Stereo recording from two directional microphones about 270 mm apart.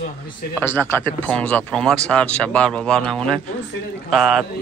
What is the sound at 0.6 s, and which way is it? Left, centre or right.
Speech, centre.